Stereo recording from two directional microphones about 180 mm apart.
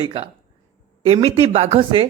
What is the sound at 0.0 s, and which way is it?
Speech, 30° right (ahead or behind).